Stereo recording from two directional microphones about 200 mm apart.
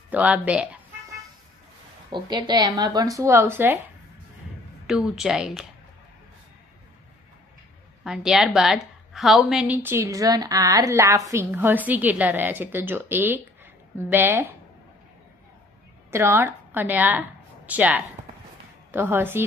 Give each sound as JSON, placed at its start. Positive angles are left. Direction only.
{"t": 0.1, "sound": "a woman's voice", "side_deg": -5}
{"t": 2.0, "sound": "speech", "side_deg": -20}
{"t": 4.8, "sound": "speech", "side_deg": -5}
{"t": 8.0, "sound": "a woman's voice", "side_deg": -5}
{"t": 16.1, "sound": "a woman's voice", "side_deg": -10}